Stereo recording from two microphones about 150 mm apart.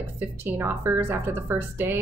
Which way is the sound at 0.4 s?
15° right (ahead or behind).